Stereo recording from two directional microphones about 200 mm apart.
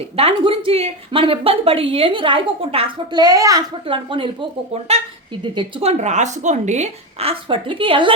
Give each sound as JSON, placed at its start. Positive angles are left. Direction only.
{"t": 0.0, "sound": "speech", "side_deg": -30}
{"t": 6.0, "sound": "speech", "side_deg": -35}